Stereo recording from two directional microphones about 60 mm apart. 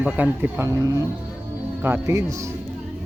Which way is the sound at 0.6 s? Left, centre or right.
Right.